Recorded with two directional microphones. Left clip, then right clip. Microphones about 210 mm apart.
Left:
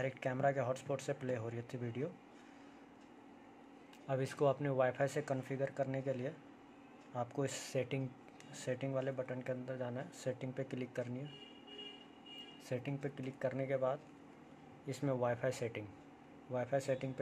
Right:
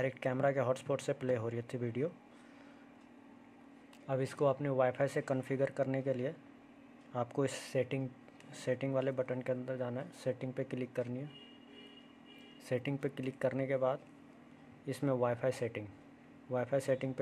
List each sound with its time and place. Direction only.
0.0 s speech: 20° right (ahead or behind)
4.1 s speech: 15° right (ahead or behind)
12.6 s speech: 25° right (ahead or behind)